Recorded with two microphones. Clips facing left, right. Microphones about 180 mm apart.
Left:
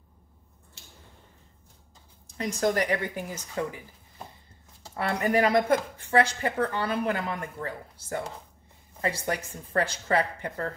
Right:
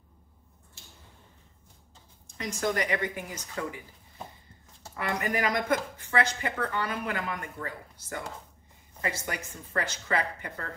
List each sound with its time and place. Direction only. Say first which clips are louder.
2.3 s speech: left 4 dB; 35° left (ahead or behind)
4.9 s speech: left 5 dB; 30° left (ahead or behind)